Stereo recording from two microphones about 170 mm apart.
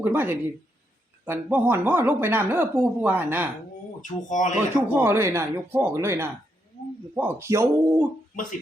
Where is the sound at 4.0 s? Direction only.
50° left (ahead or behind).